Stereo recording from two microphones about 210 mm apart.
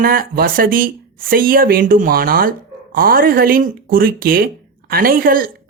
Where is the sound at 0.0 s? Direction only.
45° right (ahead or behind).